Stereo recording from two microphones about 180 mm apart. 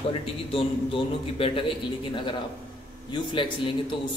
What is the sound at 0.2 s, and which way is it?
A man's voice, 30° left (ahead or behind).